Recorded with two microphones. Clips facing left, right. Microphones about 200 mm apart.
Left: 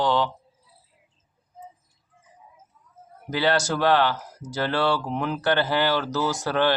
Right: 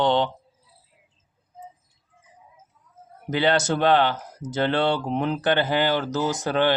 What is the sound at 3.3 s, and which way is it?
Mantra, 20° right (ahead or behind).